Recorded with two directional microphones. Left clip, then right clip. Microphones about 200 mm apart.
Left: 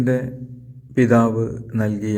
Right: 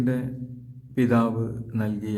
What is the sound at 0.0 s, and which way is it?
A man's voice, 20° left (ahead or behind).